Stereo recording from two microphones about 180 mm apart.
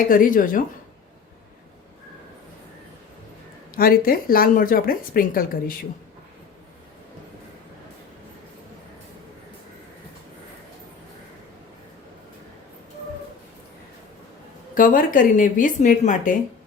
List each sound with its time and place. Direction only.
0.1 s speech: 50° left (ahead or behind)
3.8 s speech: 55° left (ahead or behind)
14.8 s speech: 50° left (ahead or behind)